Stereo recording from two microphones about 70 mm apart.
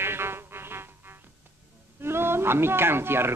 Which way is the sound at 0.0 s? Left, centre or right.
Right.